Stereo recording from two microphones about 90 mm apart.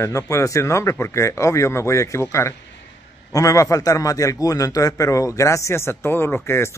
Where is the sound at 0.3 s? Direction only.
35° left (ahead or behind).